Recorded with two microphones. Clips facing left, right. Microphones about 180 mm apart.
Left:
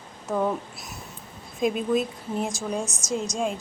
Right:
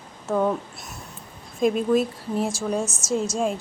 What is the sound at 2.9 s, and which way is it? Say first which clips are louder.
Speech: right 3 dB; 15° left (ahead or behind).